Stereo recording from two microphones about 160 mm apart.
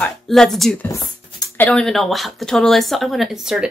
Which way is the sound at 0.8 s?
20° left (ahead or behind).